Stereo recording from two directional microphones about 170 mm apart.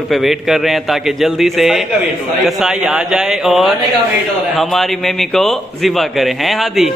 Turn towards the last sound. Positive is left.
turn(degrees=0)  # may be behind; listen again after turning